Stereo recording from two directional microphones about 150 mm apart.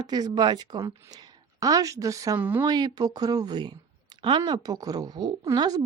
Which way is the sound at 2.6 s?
25° right (ahead or behind).